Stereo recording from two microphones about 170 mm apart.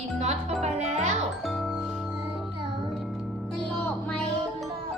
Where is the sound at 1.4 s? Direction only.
Centre (ahead or behind).